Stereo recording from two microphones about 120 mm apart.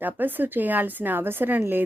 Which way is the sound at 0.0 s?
15° right (ahead or behind).